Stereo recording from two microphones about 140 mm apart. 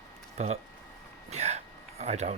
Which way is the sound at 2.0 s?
55° right (ahead or behind).